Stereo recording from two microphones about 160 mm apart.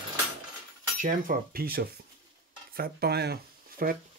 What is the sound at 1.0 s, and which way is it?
Cutlery, 60° right (ahead or behind).